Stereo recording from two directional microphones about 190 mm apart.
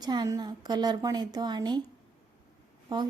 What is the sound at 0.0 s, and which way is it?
Speech, 20° right (ahead or behind).